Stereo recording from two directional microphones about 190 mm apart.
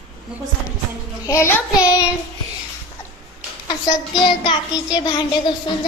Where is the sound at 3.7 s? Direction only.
25° left (ahead or behind).